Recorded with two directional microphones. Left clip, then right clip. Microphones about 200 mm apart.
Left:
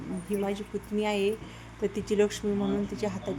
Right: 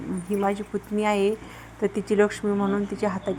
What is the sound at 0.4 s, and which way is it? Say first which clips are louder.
A woman's voice: right 7 dB; 10° right (ahead or behind).